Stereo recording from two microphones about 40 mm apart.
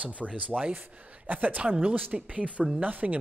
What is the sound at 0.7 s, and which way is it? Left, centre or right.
Speech, right.